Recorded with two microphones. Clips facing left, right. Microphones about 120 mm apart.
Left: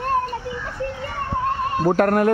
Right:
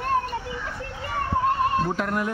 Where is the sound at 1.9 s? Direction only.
60° left (ahead or behind).